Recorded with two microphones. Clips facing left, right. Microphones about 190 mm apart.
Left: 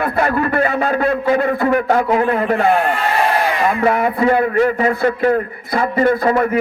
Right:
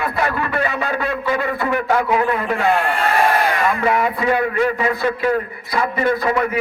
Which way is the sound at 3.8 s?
50° left (ahead or behind).